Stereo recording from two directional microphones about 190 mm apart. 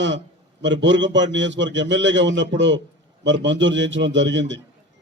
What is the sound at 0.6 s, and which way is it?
A man's voice, 75° right (ahead or behind).